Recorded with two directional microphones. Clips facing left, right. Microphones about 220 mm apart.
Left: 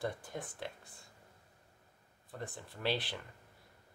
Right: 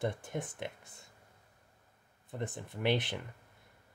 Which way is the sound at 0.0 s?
25° right (ahead or behind).